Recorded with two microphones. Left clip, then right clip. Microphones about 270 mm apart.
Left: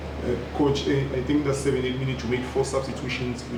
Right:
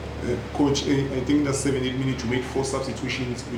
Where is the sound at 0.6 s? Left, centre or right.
Right.